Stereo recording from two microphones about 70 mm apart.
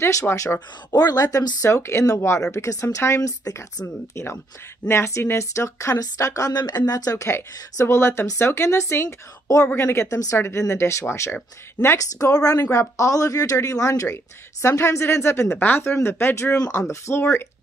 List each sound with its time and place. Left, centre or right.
0.0 s speech: left
0.9 s a woman's voice: left
1.6 s speech: left
2.5 s speech: left
3.2 s a woman's voice: left
3.8 s a woman's voice: left
7.8 s speech: left
11.3 s speech: left
12.0 s a woman's voice: left
14.0 s speech: left